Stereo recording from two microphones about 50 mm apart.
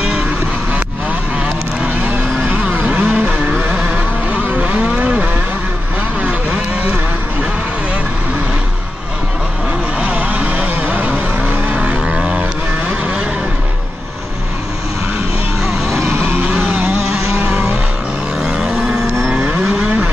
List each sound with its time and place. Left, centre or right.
1.8 s vehicle: right
9.9 s vehicle: right
16.0 s vehicle: right
16.9 s vehicle: centre